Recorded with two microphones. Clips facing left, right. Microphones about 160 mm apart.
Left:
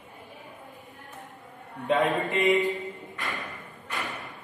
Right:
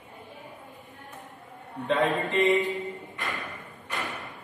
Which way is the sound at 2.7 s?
Centre (ahead or behind).